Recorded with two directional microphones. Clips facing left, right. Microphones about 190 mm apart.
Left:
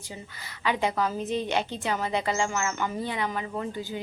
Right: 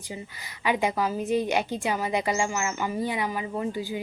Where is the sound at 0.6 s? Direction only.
15° right (ahead or behind).